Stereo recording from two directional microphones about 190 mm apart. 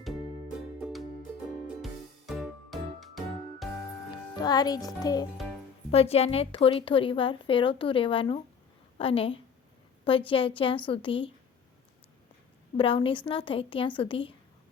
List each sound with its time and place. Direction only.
0.8 s music: 5° right (ahead or behind)
4.4 s a woman's voice: 20° left (ahead or behind)
5.9 s a woman's voice: 30° left (ahead or behind)
12.7 s a woman's voice: 30° left (ahead or behind)